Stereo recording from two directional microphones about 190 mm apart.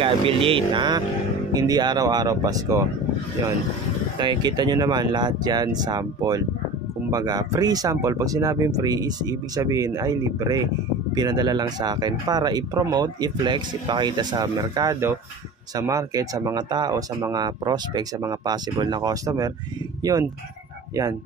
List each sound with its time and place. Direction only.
0.0 s speech: 25° right (ahead or behind)
4.2 s speech: 25° right (ahead or behind)